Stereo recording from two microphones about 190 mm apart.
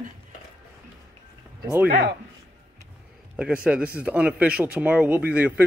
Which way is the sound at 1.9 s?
55° right (ahead or behind).